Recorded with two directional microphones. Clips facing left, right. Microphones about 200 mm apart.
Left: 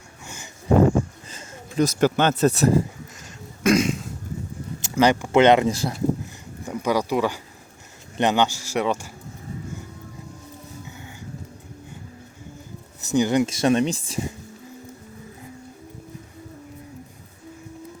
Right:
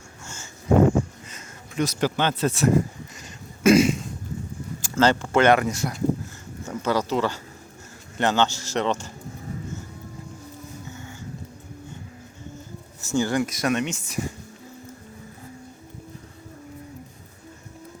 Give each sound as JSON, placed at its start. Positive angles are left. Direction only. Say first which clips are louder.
{"t": 1.3, "sound": "a sound", "louder": "left 4 dB", "side_deg": 30}
{"t": 2.0, "sound": "speech", "louder": "left 5 dB", "side_deg": 50}
{"t": 3.6, "sound": "throat clearing", "louder": "right 3 dB", "side_deg": -5}
{"t": 4.8, "sound": "speech", "louder": "left 2 dB", "side_deg": 15}
{"t": 6.7, "sound": "speech", "louder": "left 1 dB", "side_deg": 15}
{"t": 10.8, "sound": "music", "louder": "right 2 dB", "side_deg": 15}
{"t": 13.1, "sound": "speech", "louder": "left 3 dB", "side_deg": 20}